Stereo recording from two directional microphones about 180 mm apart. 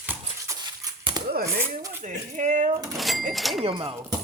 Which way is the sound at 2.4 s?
45° right (ahead or behind).